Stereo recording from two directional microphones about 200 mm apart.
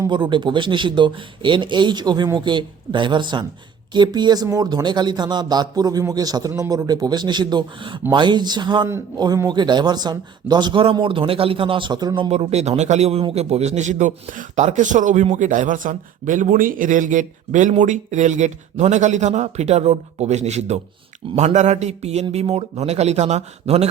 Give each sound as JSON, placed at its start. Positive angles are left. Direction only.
{"t": 0.0, "sound": "speech", "side_deg": -25}